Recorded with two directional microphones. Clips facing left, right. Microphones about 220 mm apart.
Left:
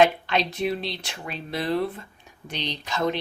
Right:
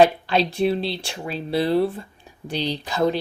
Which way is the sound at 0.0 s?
35° right (ahead or behind).